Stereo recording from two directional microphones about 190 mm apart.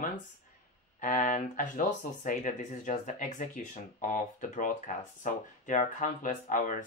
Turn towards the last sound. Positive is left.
turn(degrees=45)  # may be behind; listen again after turning